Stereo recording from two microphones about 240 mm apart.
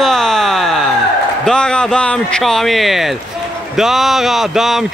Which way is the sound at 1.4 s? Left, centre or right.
Centre.